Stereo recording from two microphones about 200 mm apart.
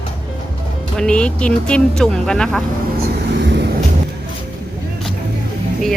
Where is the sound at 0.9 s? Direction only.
5° left (ahead or behind).